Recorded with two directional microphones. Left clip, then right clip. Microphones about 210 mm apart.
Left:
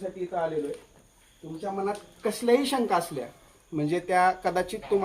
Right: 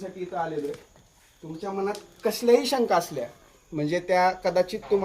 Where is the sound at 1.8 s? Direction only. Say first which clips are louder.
Right 4 dB; 35° right (ahead or behind).